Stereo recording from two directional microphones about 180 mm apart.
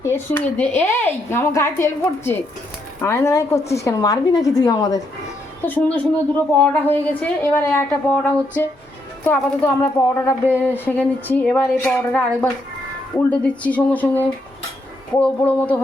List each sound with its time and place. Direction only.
0.0 s a woman's voice: 10° left (ahead or behind)
5.6 s speech: 10° left (ahead or behind)